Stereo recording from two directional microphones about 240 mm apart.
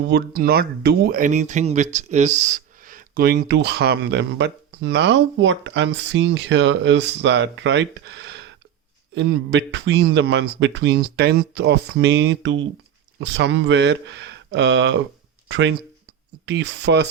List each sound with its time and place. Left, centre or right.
0.0 s speech: right